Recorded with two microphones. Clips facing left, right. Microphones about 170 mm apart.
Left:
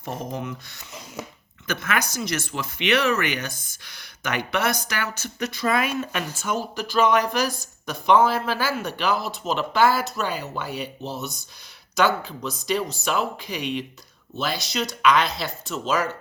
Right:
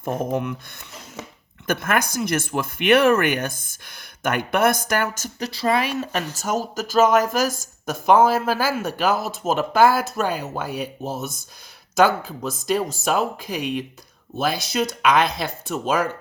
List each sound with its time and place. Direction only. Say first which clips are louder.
0.0 s speech: right 7 dB; 55° right (ahead or behind)
1.6 s speech: right 4 dB; 50° right (ahead or behind)